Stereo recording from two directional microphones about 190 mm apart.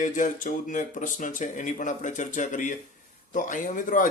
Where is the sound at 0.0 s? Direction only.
45° left (ahead or behind).